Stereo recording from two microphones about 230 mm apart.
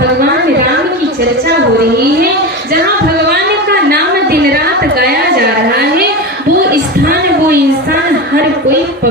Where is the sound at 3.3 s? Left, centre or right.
Right.